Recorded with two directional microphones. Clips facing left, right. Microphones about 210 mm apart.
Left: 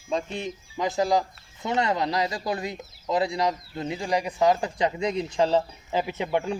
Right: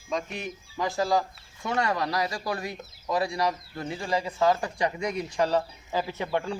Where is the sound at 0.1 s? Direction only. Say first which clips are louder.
Left 3 dB; 30° left (ahead or behind).